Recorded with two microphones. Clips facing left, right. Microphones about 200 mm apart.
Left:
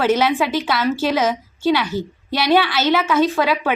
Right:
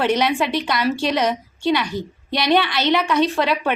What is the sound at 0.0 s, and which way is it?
A woman's voice, centre (ahead or behind).